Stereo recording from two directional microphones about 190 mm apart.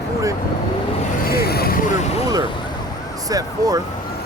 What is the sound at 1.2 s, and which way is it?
Speech, 55° left (ahead or behind).